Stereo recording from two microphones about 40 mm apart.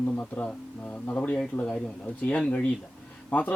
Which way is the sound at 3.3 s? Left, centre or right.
Left.